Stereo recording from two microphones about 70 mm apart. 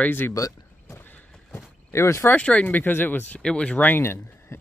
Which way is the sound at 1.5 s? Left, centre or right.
Left.